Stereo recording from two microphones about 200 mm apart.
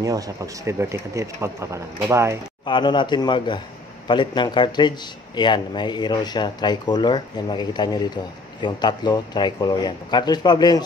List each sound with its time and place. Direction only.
0.0 s speech: 15° right (ahead or behind)
2.6 s speech: 25° left (ahead or behind)